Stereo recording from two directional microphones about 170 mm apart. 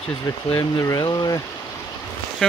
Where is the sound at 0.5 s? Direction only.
20° left (ahead or behind).